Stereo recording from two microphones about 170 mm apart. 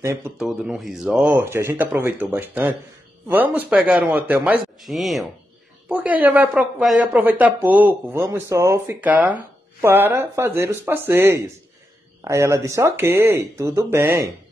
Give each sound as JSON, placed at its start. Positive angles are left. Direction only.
{"t": 0.0, "sound": "speech", "side_deg": -15}
{"t": 0.4, "sound": "speech", "side_deg": 0}